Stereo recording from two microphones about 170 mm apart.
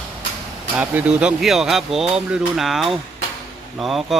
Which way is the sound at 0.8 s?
10° right (ahead or behind).